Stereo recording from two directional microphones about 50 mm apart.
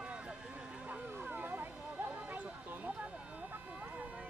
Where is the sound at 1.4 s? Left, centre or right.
Right.